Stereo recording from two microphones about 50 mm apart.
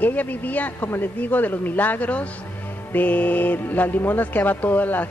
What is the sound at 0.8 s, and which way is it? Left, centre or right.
Speech, left.